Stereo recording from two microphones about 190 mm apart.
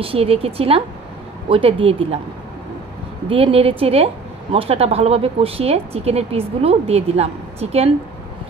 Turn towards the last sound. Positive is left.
turn(degrees=-30)  # may be behind; listen again after turning